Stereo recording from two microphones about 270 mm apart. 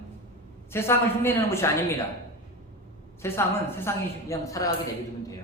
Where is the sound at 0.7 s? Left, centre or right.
Centre.